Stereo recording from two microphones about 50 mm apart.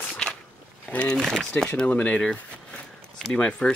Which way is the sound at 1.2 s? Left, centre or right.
Centre.